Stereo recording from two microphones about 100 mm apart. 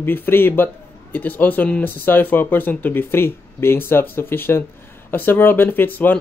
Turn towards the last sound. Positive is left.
turn(degrees=20)  # may be behind; listen again after turning